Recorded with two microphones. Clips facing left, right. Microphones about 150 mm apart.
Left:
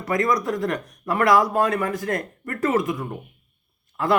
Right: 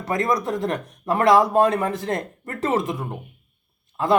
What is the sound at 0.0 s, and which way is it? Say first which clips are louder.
Speech: left 1 dB; 25° right (ahead or behind).